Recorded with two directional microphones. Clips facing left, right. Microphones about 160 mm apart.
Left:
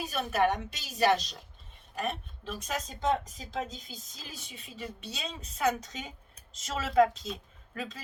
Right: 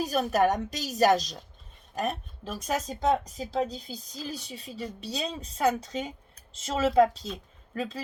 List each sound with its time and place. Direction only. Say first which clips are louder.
0.0 s speech: right 4 dB; 40° right (ahead or behind)